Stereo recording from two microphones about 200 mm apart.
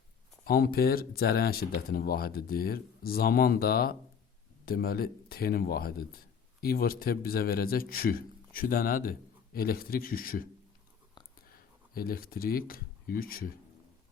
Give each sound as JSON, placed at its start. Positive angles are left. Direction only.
{"t": 0.4, "sound": "speech", "side_deg": 50}
{"t": 11.9, "sound": "speech", "side_deg": 50}